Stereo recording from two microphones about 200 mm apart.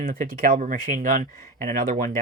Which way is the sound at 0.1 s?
45° right (ahead or behind).